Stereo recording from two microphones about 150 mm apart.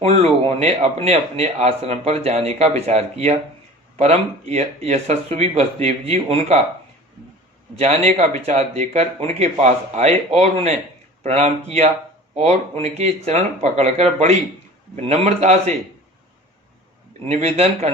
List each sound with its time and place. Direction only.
0.0 s speech: 45° right (ahead or behind)
7.8 s speech: 45° right (ahead or behind)
17.2 s speech: 45° right (ahead or behind)